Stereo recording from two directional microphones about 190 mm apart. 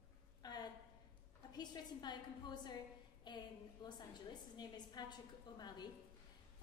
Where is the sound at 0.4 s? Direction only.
20° left (ahead or behind).